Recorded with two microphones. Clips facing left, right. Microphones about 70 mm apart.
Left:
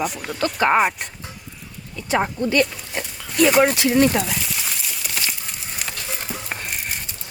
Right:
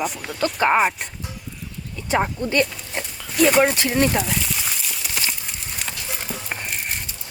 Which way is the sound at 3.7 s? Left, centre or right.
Right.